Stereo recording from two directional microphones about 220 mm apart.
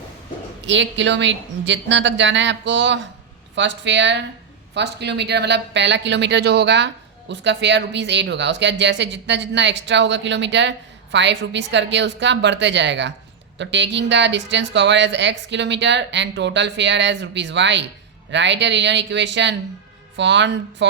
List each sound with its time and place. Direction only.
0.6 s a woman's voice: 55° right (ahead or behind)